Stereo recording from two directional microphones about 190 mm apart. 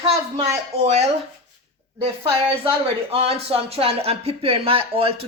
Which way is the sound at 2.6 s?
30° right (ahead or behind).